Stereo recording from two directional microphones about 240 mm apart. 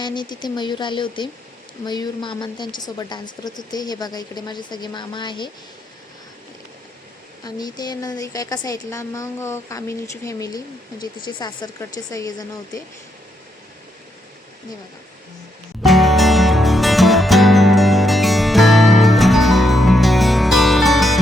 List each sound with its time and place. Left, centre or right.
0.0 s a woman's voice: centre
7.4 s a woman's voice: centre
15.8 s music: centre